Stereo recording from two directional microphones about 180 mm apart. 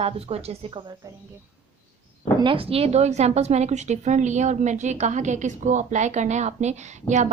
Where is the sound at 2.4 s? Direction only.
30° right (ahead or behind).